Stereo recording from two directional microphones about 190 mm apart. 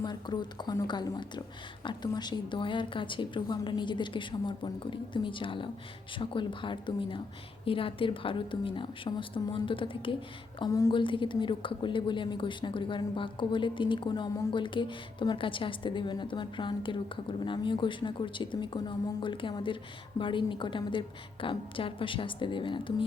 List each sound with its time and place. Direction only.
0.0 s a woman's voice: 20° left (ahead or behind)